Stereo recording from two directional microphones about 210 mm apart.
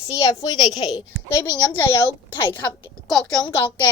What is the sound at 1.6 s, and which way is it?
Speech, 10° left (ahead or behind).